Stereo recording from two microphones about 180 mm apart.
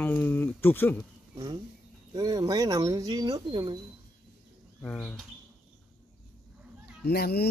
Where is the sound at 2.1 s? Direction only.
20° right (ahead or behind).